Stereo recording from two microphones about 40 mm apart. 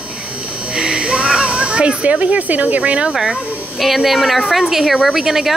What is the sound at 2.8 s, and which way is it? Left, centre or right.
Speech, right.